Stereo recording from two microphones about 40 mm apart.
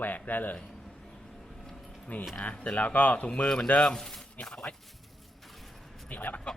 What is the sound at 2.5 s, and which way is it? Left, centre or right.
Speech, left.